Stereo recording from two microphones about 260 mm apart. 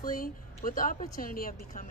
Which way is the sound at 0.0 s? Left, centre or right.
Left.